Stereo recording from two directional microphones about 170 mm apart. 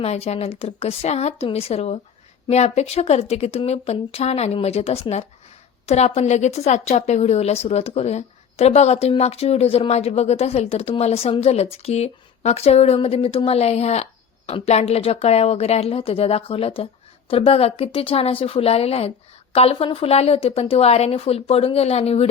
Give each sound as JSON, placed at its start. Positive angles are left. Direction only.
{"t": 0.0, "sound": "a woman's voice", "side_deg": 40}